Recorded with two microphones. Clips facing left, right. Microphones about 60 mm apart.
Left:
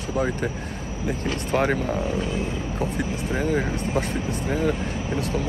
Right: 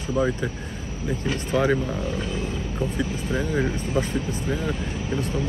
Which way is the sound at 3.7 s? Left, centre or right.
Left.